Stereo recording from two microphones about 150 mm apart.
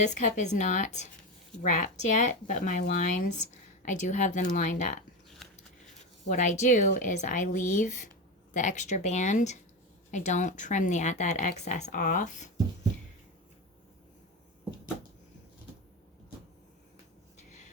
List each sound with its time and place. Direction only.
0.0 s a woman's voice: 55° left (ahead or behind)
5.4 s scissors: centre (ahead or behind)
6.2 s a woman's voice: 55° left (ahead or behind)